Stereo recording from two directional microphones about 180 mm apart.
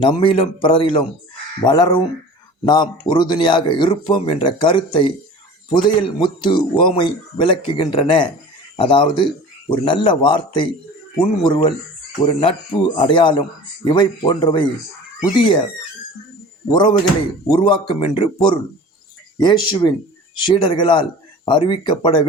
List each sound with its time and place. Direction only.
0.0 s a man's voice: 30° left (ahead or behind)
17.4 s a man's voice: 25° left (ahead or behind)